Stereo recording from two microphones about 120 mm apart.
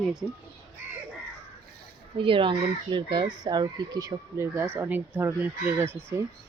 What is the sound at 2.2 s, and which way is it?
Speech, 45° right (ahead or behind).